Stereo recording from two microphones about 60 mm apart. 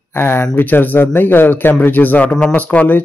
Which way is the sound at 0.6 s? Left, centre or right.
Left.